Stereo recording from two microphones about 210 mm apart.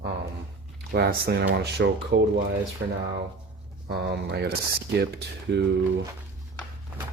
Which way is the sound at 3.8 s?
50° right (ahead or behind).